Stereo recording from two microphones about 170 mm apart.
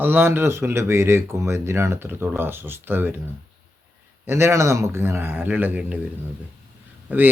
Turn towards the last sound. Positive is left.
turn(degrees=-10)  # may be behind; listen again after turning